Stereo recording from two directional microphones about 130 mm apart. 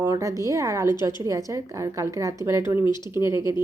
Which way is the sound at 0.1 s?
25° right (ahead or behind).